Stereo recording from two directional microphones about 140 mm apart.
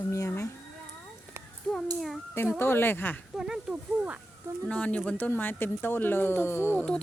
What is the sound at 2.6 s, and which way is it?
Speech, 15° left (ahead or behind).